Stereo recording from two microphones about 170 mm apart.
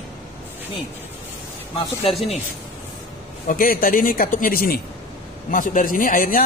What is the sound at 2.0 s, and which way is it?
Speech, 35° left (ahead or behind).